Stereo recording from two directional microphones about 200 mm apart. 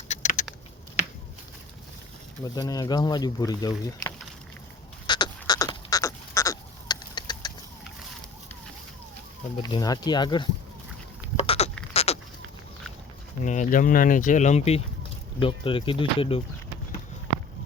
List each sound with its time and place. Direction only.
0.1 s typing: 35° left (ahead or behind)
2.4 s speech: 20° left (ahead or behind)
5.0 s a sound: 20° left (ahead or behind)
9.6 s speech: 20° left (ahead or behind)
11.3 s a sound: 30° left (ahead or behind)
11.9 s sheep: 30° left (ahead or behind)
13.4 s speech: 40° left (ahead or behind)